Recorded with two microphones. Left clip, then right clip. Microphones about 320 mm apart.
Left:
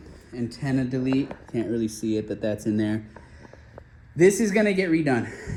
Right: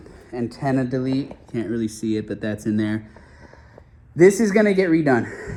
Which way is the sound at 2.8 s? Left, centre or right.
Right.